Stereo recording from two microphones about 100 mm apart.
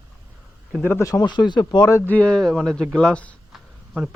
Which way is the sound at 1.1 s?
45° left (ahead or behind).